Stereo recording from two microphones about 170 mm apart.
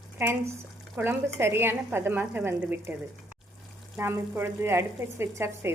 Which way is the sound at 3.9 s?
15° right (ahead or behind).